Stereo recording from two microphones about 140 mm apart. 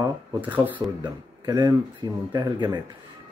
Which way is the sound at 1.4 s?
30° right (ahead or behind).